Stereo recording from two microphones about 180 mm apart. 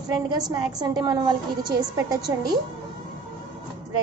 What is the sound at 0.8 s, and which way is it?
Speech, 25° right (ahead or behind).